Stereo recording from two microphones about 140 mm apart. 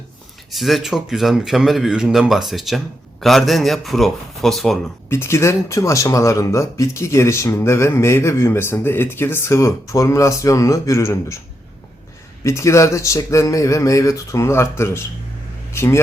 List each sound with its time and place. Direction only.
0.5 s speech: centre (ahead or behind)
5.0 s speech: 20° left (ahead or behind)
12.4 s a man's voice: 20° left (ahead or behind)